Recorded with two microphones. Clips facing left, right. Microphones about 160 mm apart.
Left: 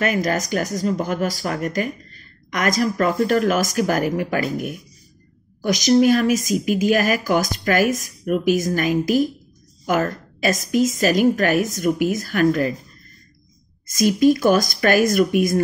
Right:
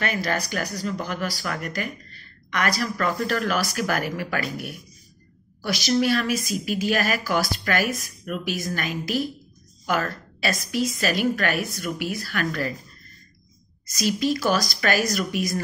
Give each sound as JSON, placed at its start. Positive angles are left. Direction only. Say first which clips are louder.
{"t": 0.0, "sound": "a woman's voice", "louder": "left 6 dB", "side_deg": 45}
{"t": 13.8, "sound": "a woman's voice", "louder": "left 8 dB", "side_deg": 50}